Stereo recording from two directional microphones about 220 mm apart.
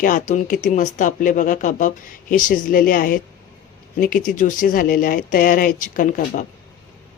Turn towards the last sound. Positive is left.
turn(degrees=35)  # may be behind; listen again after turning